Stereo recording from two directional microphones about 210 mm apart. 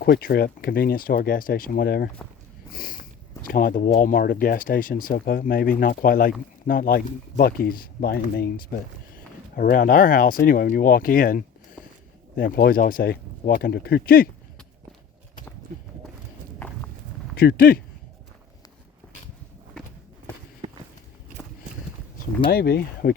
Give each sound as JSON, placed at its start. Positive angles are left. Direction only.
{"t": 0.0, "sound": "speech", "side_deg": 45}
{"t": 17.3, "sound": "speech", "side_deg": 45}
{"t": 22.4, "sound": "speech", "side_deg": 45}